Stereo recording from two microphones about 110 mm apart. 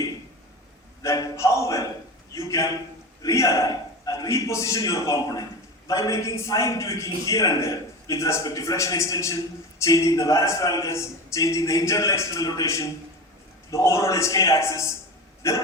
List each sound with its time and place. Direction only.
1.0 s a man's voice: 30° left (ahead or behind)